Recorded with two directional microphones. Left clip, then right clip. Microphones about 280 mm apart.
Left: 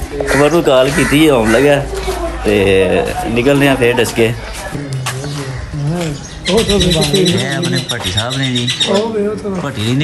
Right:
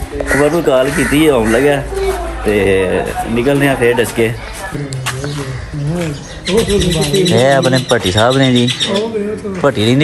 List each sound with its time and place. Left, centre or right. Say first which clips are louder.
0.4 s speech: left 2 dB; centre
5.9 s speech: right 1 dB; centre